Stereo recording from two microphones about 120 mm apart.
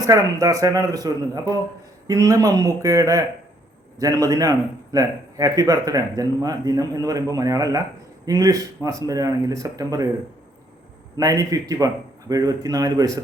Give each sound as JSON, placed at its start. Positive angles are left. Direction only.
{"t": 0.0, "sound": "a man's voice", "side_deg": -25}
{"t": 11.2, "sound": "a man's voice", "side_deg": -30}